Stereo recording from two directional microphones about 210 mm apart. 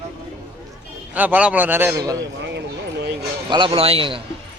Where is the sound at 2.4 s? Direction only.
55° right (ahead or behind).